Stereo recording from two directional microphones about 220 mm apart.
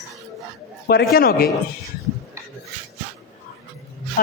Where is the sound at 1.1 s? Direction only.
45° left (ahead or behind).